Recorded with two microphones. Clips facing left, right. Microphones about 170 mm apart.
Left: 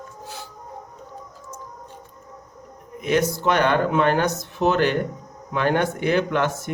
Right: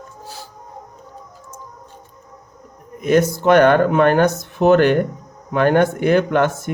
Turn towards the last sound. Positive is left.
turn(degrees=-50)  # may be behind; listen again after turning